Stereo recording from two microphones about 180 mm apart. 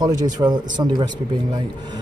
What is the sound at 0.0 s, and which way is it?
A man's voice, 25° right (ahead or behind).